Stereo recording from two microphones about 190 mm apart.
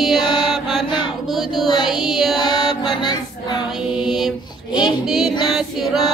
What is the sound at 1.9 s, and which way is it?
Music, centre (ahead or behind).